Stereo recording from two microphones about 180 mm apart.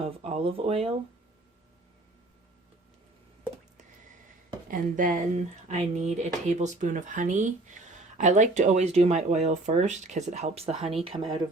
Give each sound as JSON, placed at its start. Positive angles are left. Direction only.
{"t": 0.0, "sound": "speech", "side_deg": -35}
{"t": 4.7, "sound": "speech", "side_deg": -50}